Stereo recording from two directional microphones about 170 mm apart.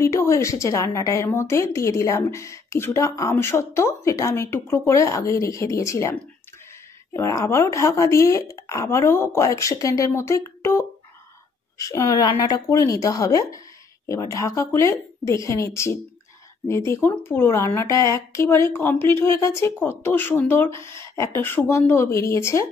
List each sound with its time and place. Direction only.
0.0 s a woman's voice: 15° left (ahead or behind)
7.2 s a woman's voice: 20° left (ahead or behind)